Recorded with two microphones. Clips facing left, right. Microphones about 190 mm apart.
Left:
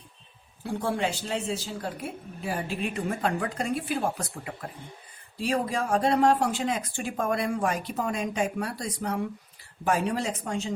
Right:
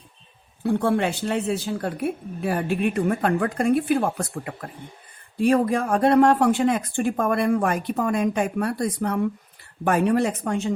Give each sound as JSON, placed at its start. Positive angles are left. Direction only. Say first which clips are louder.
{"t": 0.6, "sound": "a woman's voice", "louder": "right 7 dB", "side_deg": -60}